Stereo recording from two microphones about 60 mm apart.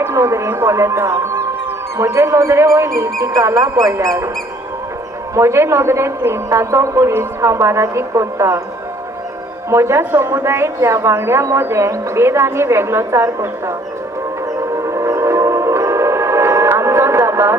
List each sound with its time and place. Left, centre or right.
0.0 s a man's voice: right
5.3 s a man's voice: right
9.7 s a man's voice: right
14.8 s train: right